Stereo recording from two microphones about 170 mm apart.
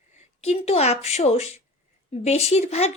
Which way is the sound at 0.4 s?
40° left (ahead or behind).